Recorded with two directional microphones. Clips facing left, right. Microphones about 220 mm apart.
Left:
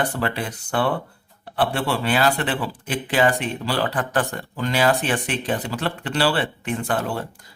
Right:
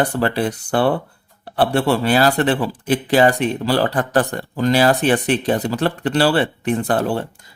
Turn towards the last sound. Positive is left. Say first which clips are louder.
# right 6 dB
turn(degrees=-35)  # may be behind; listen again after turning